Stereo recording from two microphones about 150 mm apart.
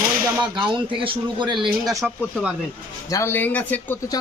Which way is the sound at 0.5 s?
35° right (ahead or behind).